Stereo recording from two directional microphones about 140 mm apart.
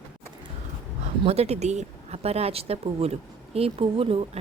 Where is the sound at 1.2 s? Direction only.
50° right (ahead or behind).